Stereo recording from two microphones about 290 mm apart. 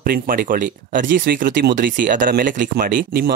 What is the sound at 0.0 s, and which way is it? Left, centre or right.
Speech, right.